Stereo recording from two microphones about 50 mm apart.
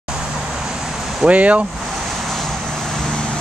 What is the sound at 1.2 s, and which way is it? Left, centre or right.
Speech, right.